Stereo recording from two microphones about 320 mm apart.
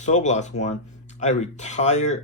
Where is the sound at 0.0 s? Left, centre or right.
Left.